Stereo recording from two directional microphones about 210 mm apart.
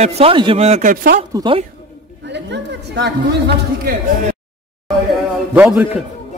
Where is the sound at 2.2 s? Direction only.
55° right (ahead or behind).